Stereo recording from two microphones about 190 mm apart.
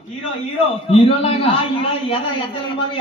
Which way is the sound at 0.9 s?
30° left (ahead or behind).